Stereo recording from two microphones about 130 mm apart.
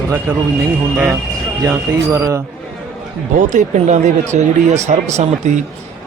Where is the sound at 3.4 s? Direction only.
70° right (ahead or behind).